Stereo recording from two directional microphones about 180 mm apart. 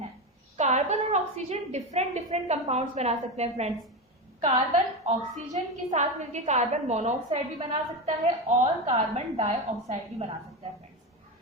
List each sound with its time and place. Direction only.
0.5 s a woman's voice: 40° right (ahead or behind)